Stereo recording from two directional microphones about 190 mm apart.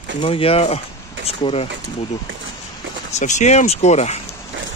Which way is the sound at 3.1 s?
40° left (ahead or behind).